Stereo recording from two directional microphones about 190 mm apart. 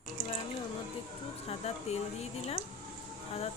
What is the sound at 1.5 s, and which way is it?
Speech, 35° left (ahead or behind).